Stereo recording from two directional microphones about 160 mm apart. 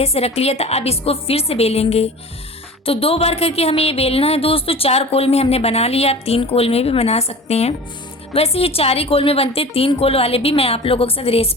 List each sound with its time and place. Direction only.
0.0 s a woman's voice: 40° left (ahead or behind)